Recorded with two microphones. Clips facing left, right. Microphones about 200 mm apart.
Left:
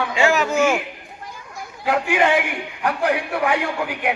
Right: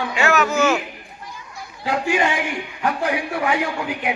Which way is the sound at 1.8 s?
60° left (ahead or behind).